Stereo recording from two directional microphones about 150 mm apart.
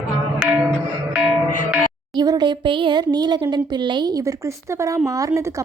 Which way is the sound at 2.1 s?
25° right (ahead or behind).